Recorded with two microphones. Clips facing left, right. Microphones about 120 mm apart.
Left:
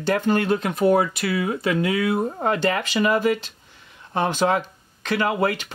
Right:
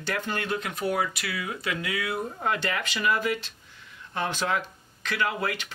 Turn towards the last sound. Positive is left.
turn(degrees=35)  # may be behind; listen again after turning